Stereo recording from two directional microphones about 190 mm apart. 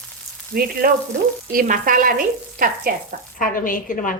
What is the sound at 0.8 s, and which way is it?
Frying, 50° right (ahead or behind).